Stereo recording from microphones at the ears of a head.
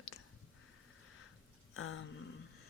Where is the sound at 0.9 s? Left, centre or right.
Left.